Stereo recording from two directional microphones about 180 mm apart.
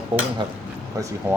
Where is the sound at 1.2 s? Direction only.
10° right (ahead or behind).